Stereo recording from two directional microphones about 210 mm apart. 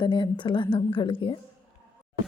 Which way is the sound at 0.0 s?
25° left (ahead or behind).